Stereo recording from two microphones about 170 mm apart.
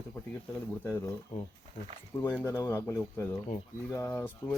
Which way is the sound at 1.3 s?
45° left (ahead or behind).